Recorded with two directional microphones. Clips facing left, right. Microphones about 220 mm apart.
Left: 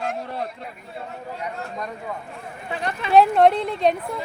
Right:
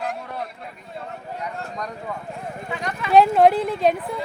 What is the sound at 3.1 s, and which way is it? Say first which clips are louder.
Speech: right 1 dB; centre (ahead or behind).